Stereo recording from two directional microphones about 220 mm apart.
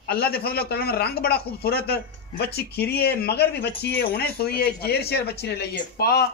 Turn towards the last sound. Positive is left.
turn(degrees=45)  # may be behind; listen again after turning